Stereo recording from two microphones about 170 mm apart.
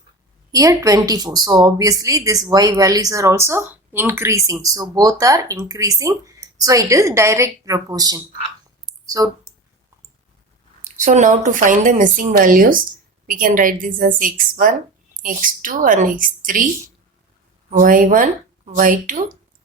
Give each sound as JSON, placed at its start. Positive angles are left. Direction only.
{"t": 0.5, "sound": "a woman's voice", "side_deg": -20}
{"t": 8.9, "sound": "a sound", "side_deg": -20}
{"t": 10.8, "sound": "speech", "side_deg": -45}
{"t": 17.7, "sound": "speech", "side_deg": -55}